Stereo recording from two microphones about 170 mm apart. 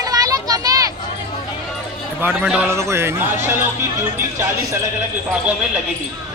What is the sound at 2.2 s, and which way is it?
A man's voice, 10° right (ahead or behind).